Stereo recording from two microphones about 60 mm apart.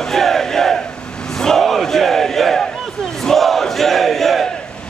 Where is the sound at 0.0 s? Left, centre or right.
Centre.